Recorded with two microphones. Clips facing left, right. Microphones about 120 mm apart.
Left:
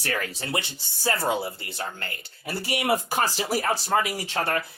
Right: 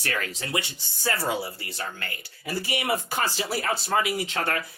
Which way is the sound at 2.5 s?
60° left (ahead or behind).